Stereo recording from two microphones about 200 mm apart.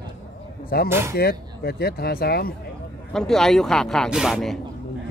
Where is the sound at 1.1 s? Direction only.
50° left (ahead or behind).